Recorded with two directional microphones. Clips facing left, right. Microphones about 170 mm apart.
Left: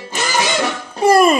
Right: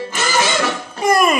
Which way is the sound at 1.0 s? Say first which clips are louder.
Left 4 dB; 30° left (ahead or behind).